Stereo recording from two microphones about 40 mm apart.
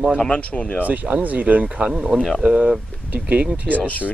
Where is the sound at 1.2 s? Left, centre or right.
Right.